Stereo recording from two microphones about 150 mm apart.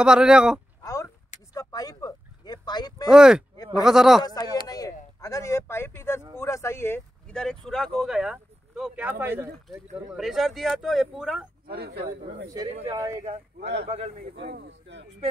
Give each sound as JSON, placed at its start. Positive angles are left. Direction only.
{"t": 0.0, "sound": "speech", "side_deg": -5}
{"t": 1.5, "sound": "a sound", "side_deg": 25}
{"t": 3.1, "sound": "speech", "side_deg": -5}
{"t": 4.2, "sound": "speech", "side_deg": 25}
{"t": 4.6, "sound": "a sound", "side_deg": 25}
{"t": 6.3, "sound": "speech", "side_deg": 20}
{"t": 10.1, "sound": "speech", "side_deg": 0}
{"t": 11.6, "sound": "speech", "side_deg": -90}
{"t": 12.9, "sound": "speech", "side_deg": -20}
{"t": 13.7, "sound": "a man's voice", "side_deg": -45}